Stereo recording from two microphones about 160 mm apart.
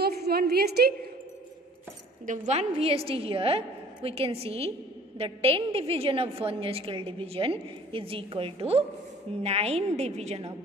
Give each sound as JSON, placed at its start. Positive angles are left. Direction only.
{"t": 0.0, "sound": "a woman's voice", "side_deg": -85}
{"t": 2.2, "sound": "a woman's voice", "side_deg": -50}